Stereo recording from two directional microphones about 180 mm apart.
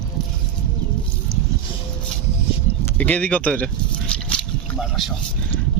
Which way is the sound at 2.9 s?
10° left (ahead or behind).